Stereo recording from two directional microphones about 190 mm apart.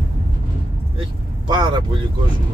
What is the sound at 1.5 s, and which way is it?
Speech, 25° right (ahead or behind).